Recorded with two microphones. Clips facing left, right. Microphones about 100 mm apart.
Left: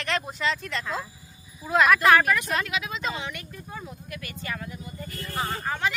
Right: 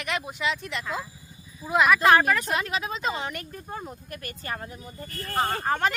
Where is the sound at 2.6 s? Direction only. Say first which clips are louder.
Right 2 dB; 35° right (ahead or behind).